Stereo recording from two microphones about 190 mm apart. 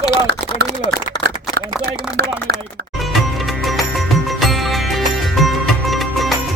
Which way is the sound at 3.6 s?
Centre (ahead or behind).